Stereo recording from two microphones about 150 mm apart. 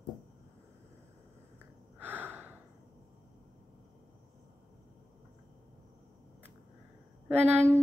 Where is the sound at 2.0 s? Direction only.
10° right (ahead or behind).